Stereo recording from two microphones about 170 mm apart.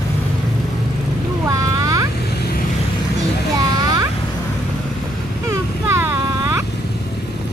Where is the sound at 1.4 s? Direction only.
20° right (ahead or behind).